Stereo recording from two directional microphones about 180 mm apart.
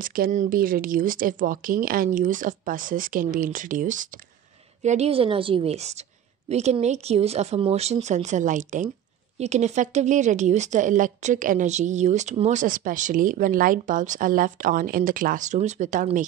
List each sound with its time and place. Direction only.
0.0 s a woman's voice: 50° right (ahead or behind)